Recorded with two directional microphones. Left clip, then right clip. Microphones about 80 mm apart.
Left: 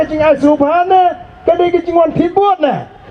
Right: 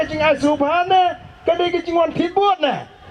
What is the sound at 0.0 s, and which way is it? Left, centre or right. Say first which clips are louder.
A man's voice: left 6 dB; right.